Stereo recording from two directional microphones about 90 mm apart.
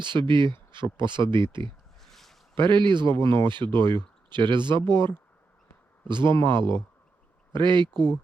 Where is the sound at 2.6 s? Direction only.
60° right (ahead or behind).